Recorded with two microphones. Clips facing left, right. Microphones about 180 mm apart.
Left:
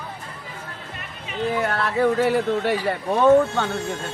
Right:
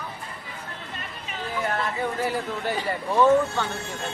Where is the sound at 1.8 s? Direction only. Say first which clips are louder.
Left 8 dB; 70° left (ahead or behind).